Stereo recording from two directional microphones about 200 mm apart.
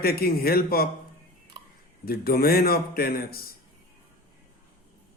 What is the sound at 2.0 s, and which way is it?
A man's voice, 50° left (ahead or behind).